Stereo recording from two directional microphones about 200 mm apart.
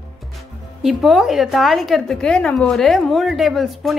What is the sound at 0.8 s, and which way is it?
A woman's voice, centre (ahead or behind).